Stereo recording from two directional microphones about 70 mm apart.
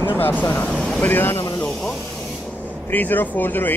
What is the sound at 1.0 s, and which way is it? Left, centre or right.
Speech, left.